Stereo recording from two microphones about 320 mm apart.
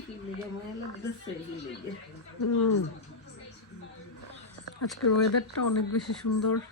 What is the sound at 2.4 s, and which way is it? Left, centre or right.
Speech, left.